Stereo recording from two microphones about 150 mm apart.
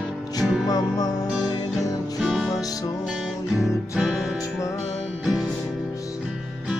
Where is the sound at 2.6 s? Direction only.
25° left (ahead or behind).